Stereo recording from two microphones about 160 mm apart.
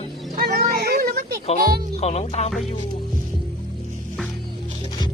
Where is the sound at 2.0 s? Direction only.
40° left (ahead or behind).